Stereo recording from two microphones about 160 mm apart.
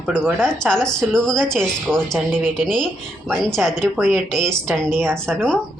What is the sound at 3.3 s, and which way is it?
A woman's voice, centre (ahead or behind).